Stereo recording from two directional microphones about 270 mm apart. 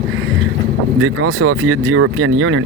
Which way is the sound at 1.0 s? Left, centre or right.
Right.